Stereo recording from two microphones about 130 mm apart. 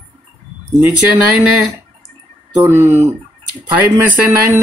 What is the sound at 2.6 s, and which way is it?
Speech, 20° right (ahead or behind).